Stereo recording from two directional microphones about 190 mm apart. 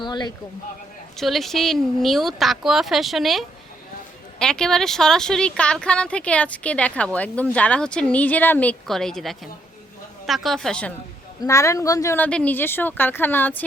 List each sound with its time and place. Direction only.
0.0 s a sound: 20° left (ahead or behind)
1.1 s speech: centre (ahead or behind)
11.4 s speech: 15° left (ahead or behind)